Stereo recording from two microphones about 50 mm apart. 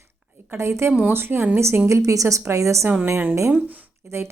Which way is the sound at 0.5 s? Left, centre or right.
Right.